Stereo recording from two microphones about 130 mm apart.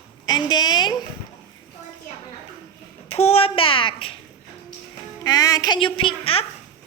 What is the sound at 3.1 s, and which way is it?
A child's voice, 50° left (ahead or behind).